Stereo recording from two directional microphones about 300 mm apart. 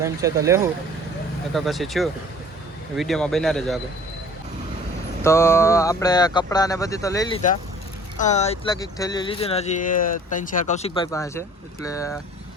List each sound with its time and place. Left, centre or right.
0.0 s speech: centre
5.2 s speech: centre